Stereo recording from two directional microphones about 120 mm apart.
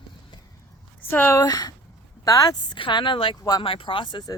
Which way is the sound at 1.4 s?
35° left (ahead or behind).